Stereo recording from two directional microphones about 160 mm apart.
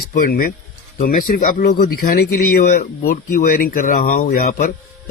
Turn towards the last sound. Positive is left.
turn(degrees=55)  # may be behind; listen again after turning